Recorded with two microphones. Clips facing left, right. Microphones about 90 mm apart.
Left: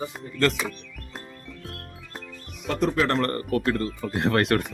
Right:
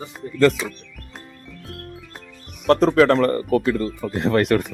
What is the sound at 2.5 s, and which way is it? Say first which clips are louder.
Speech: right 9 dB; 80° right.